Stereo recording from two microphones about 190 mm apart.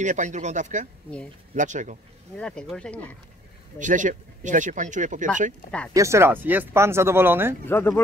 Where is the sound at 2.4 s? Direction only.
5° left (ahead or behind).